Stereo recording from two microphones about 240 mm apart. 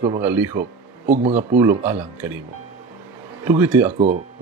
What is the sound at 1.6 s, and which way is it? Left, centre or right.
Speech, centre.